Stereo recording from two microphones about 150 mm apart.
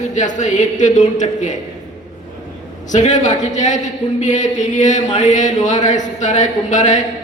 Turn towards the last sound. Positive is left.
turn(degrees=55)  # may be behind; listen again after turning